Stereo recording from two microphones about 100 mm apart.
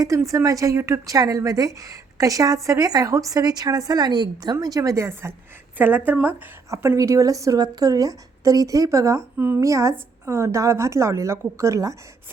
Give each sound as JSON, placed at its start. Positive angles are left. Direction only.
{"t": 0.0, "sound": "a woman's voice", "side_deg": -30}
{"t": 5.7, "sound": "a woman's voice", "side_deg": -20}
{"t": 6.7, "sound": "a woman's voice", "side_deg": -30}